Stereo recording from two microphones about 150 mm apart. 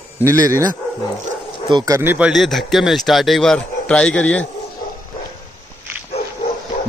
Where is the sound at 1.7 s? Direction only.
30° right (ahead or behind).